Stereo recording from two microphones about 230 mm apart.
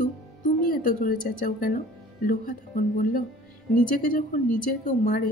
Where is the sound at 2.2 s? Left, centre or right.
Left.